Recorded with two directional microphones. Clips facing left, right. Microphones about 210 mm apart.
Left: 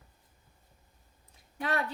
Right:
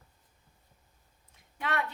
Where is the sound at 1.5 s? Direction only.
35° left (ahead or behind).